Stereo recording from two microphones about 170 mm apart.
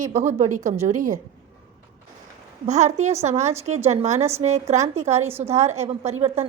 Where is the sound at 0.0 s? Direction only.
45° right (ahead or behind).